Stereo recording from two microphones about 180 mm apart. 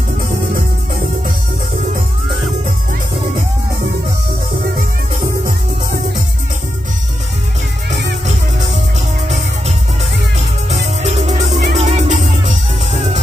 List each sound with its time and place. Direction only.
10.7 s music: 40° right (ahead or behind)